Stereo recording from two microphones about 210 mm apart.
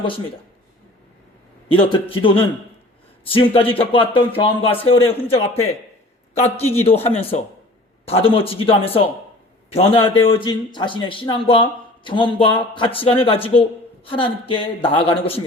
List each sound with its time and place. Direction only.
1.6 s a man's voice: 25° left (ahead or behind)
6.8 s a man's voice: 30° left (ahead or behind)